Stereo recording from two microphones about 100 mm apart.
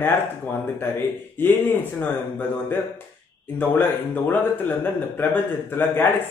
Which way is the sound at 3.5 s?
20° left (ahead or behind).